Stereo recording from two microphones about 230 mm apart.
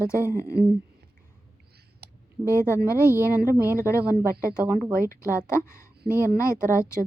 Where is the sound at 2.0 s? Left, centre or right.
Right.